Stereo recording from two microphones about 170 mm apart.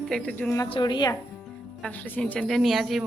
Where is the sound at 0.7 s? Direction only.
25° left (ahead or behind).